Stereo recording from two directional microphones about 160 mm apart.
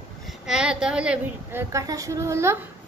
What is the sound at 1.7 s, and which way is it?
Speech, 20° right (ahead or behind).